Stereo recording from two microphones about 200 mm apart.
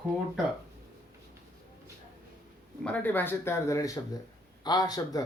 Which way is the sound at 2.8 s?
10° left (ahead or behind).